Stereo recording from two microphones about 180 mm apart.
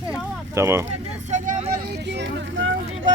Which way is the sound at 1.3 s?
45° right (ahead or behind).